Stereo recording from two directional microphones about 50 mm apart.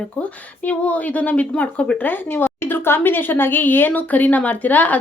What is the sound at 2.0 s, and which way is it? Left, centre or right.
A woman's voice, left.